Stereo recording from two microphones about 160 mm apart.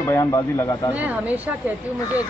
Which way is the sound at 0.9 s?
10° right (ahead or behind).